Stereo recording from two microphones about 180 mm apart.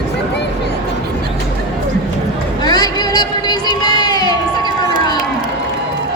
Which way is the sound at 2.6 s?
20° left (ahead or behind).